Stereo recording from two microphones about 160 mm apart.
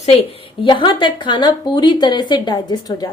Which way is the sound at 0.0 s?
40° left (ahead or behind).